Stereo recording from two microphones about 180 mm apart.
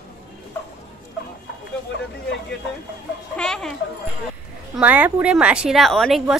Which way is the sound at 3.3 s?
5° left (ahead or behind).